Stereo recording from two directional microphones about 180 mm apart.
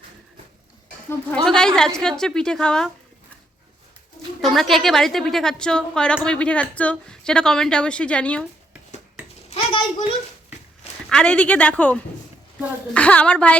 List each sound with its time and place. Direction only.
1.5 s a woman's voice: 5° left (ahead or behind)
4.4 s a woman's voice: centre (ahead or behind)
9.5 s a sound: 35° left (ahead or behind)
11.1 s a woman's voice: 5° left (ahead or behind)